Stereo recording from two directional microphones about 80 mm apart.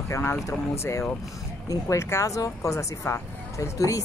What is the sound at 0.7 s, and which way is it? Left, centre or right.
Speech, left.